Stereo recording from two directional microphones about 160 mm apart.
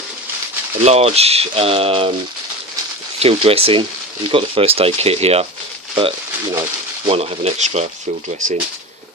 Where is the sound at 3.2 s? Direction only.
40° right (ahead or behind).